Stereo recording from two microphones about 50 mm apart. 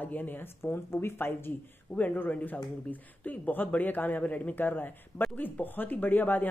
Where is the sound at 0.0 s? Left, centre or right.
Left.